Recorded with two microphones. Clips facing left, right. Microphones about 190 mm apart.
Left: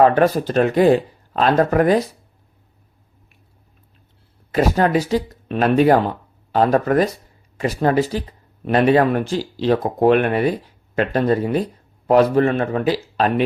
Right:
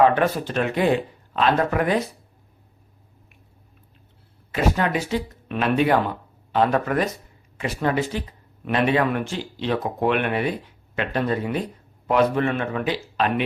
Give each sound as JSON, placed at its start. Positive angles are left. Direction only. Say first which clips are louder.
{"t": 0.0, "sound": "speech", "louder": "left 4 dB", "side_deg": 40}
{"t": 4.5, "sound": "speech", "louder": "left 5 dB", "side_deg": 40}